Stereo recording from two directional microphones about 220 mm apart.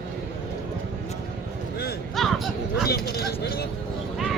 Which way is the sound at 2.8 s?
45° left (ahead or behind).